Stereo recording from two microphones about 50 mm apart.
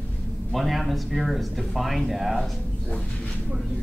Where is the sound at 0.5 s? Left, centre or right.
Centre.